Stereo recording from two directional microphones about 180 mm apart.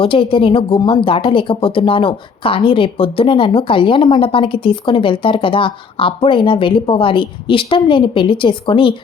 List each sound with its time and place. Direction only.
0.0 s speech: 30° left (ahead or behind)